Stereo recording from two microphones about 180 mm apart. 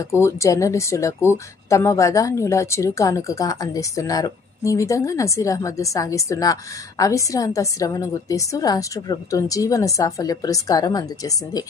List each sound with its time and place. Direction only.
0.0 s speech: 15° left (ahead or behind)